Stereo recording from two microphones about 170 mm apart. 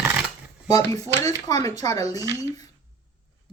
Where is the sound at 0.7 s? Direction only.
20° left (ahead or behind).